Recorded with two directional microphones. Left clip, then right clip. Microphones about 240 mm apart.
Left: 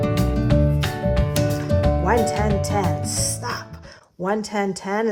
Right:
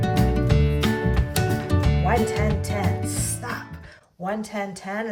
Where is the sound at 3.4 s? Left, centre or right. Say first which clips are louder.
Left 3 dB; centre.